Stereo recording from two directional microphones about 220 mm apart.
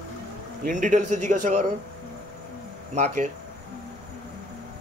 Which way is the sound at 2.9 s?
30° right (ahead or behind).